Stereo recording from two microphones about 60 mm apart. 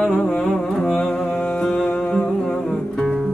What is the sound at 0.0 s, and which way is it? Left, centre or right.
Music, centre.